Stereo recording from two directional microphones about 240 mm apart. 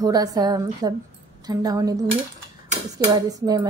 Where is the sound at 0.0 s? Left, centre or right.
Centre.